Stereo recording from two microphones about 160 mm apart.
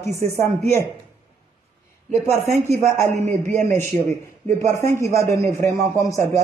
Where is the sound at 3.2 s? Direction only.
50° right (ahead or behind).